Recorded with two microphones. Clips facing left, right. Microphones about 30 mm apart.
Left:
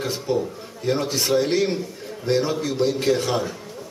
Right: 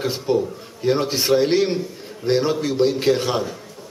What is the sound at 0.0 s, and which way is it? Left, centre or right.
A man's voice, centre.